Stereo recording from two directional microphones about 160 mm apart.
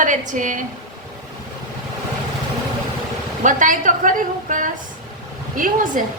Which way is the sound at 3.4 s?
55° right (ahead or behind).